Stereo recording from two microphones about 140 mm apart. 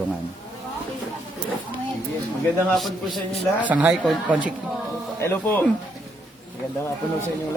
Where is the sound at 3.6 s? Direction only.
10° right (ahead or behind).